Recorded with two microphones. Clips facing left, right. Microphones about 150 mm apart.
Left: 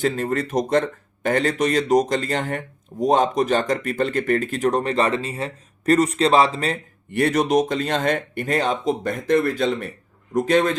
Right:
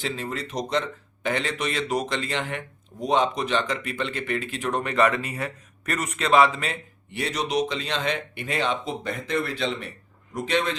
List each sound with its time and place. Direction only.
0.0 s speech: 50° left (ahead or behind)
7.1 s speech: 55° left (ahead or behind)